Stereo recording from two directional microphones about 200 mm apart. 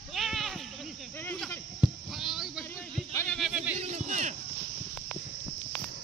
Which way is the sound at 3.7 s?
35° right (ahead or behind).